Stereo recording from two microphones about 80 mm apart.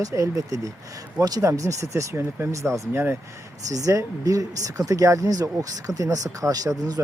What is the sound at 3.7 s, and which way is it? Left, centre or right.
Speech, right.